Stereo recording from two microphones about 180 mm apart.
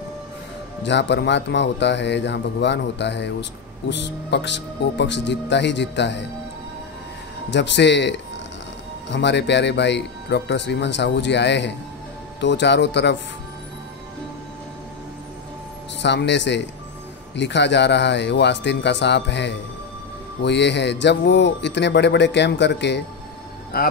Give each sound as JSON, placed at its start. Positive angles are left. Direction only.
{"t": 0.8, "sound": "speech", "side_deg": 75}
{"t": 7.5, "sound": "speech", "side_deg": 80}
{"t": 16.0, "sound": "speech", "side_deg": 75}
{"t": 23.7, "sound": "speech", "side_deg": 60}